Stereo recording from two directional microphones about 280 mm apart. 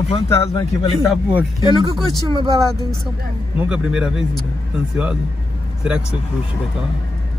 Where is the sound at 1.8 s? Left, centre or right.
Centre.